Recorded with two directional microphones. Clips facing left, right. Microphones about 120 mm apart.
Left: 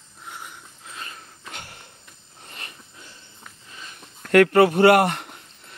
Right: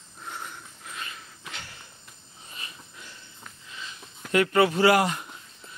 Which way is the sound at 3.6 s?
45° left (ahead or behind).